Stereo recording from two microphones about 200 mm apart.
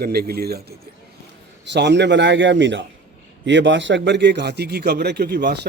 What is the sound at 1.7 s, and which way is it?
A man's voice, 60° right (ahead or behind).